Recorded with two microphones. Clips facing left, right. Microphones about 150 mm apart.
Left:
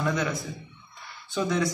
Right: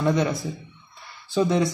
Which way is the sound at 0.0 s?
20° right (ahead or behind).